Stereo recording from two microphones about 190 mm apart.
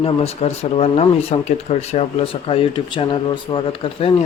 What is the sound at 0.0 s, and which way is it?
Speech, 35° left (ahead or behind).